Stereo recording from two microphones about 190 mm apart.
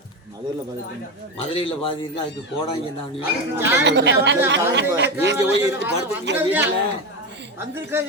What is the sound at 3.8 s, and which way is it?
Speech, 65° right (ahead or behind).